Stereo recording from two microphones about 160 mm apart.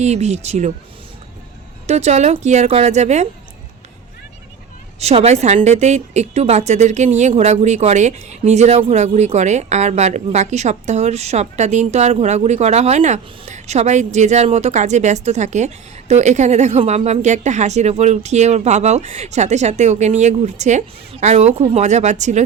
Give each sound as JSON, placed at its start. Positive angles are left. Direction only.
{"t": 0.0, "sound": "a woman's voice", "side_deg": -45}
{"t": 1.9, "sound": "a woman's voice", "side_deg": -45}
{"t": 4.9, "sound": "a woman's voice", "side_deg": -40}